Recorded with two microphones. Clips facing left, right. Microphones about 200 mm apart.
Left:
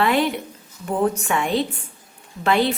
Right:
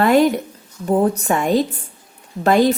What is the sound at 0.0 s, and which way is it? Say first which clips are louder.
A woman's voice: right 6 dB; 40° right (ahead or behind).